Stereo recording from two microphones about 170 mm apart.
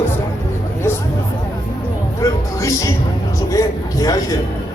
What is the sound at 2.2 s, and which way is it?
A man's voice, 20° left (ahead or behind).